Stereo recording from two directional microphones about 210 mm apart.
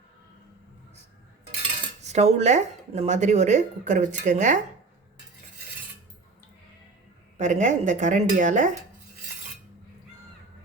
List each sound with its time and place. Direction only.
2.0 s speech: 30° right (ahead or behind)
7.3 s speech: 35° right (ahead or behind)